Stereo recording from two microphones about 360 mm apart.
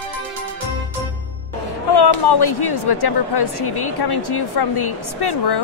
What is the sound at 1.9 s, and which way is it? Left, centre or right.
A woman's voice, left.